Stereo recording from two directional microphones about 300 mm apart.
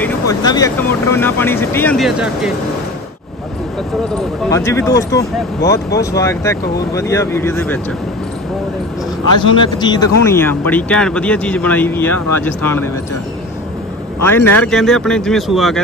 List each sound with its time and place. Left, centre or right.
0.0 s speech: centre
4.5 s speech: centre
9.4 s speech: centre
14.2 s speech: centre